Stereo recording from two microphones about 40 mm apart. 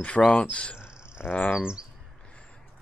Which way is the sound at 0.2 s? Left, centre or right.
Left.